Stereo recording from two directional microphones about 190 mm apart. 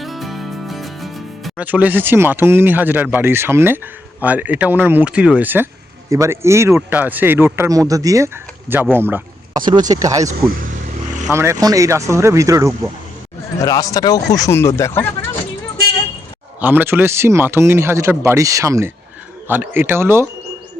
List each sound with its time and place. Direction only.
0.0 s music: centre (ahead or behind)
4.2 s a man's voice: 10° right (ahead or behind)
9.6 s a man's voice: 25° right (ahead or behind)
10.3 s speech: 50° right (ahead or behind)
11.3 s a man's voice: 15° right (ahead or behind)
13.6 s speech: 15° left (ahead or behind)
16.6 s a man's voice: 10° right (ahead or behind)